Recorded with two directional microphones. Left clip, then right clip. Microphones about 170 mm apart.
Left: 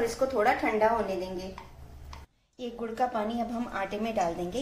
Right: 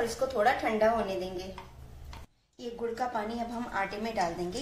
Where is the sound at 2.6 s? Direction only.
35° left (ahead or behind).